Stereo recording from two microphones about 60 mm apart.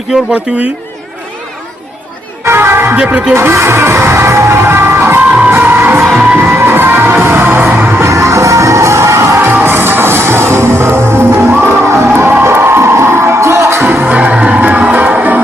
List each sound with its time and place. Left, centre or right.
2.4 s music: right
2.9 s speech: right
3.3 s speech: right
5.5 s music: right
7.9 s music: right
9.4 s music: right
13.8 s music: right